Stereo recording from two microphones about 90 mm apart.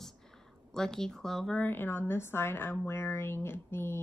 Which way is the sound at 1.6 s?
25° left (ahead or behind).